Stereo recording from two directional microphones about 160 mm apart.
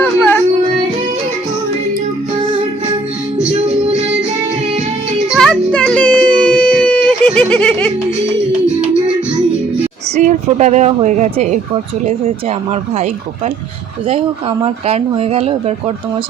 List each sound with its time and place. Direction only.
0.0 s a sound: 10° left (ahead or behind)
5.3 s music: 5° left (ahead or behind)
10.2 s a woman's voice: 50° right (ahead or behind)
14.6 s speech: 40° right (ahead or behind)